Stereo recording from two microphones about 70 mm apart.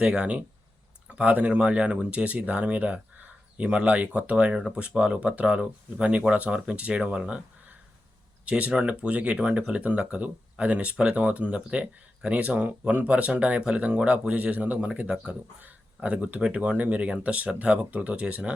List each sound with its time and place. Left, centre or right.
0.0 s speech: centre
8.4 s speech: centre